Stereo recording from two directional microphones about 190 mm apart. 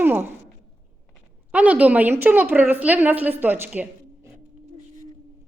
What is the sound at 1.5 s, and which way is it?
A woman's voice, 5° right (ahead or behind).